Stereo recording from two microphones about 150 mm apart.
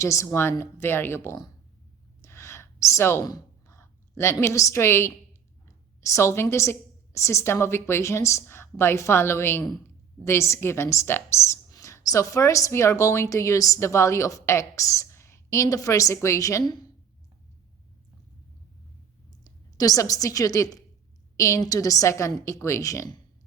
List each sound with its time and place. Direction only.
0.0 s a woman's voice: 20° left (ahead or behind)
2.2 s a sound: 20° left (ahead or behind)
4.2 s a woman's voice: 20° left (ahead or behind)
19.3 s a woman's voice: 25° left (ahead or behind)